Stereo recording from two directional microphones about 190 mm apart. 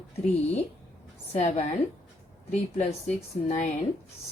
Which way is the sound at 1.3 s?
35° left (ahead or behind).